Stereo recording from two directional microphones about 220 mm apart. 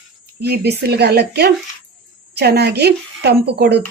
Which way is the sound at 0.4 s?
45° right (ahead or behind).